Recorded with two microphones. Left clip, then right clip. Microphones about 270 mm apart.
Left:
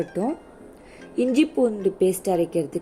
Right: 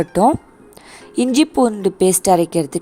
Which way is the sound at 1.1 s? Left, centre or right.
Right.